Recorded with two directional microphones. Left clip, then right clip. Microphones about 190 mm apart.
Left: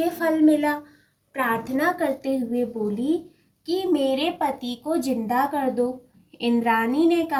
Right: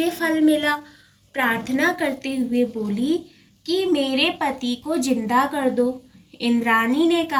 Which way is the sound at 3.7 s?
45° left (ahead or behind).